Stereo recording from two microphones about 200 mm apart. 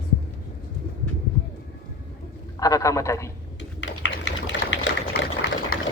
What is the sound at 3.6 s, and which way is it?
Typing, 65° left (ahead or behind).